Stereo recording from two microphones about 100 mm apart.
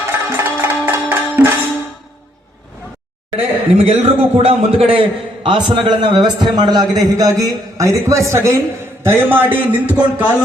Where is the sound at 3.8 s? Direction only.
90° right; by 5.0 s 70° right (ahead or behind).